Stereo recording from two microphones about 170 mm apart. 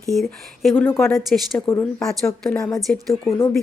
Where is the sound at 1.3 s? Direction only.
5° left (ahead or behind).